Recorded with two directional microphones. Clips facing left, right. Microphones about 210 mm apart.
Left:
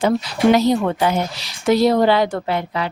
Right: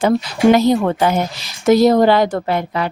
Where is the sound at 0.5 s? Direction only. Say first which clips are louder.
Right 2 dB; 50° right (ahead or behind).